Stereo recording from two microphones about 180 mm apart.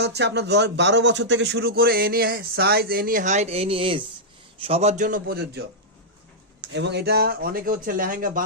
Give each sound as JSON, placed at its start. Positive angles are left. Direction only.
{"t": 0.0, "sound": "a man's voice", "side_deg": -70}
{"t": 6.6, "sound": "speech", "side_deg": -75}